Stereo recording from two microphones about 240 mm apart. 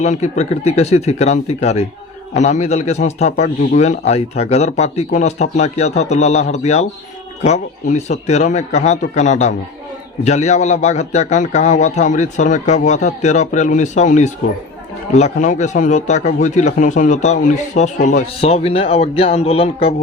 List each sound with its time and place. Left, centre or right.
0.0 s a man's voice: left